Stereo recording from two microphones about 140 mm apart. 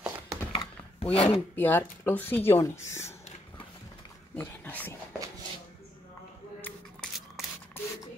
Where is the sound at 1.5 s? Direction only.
15° left (ahead or behind).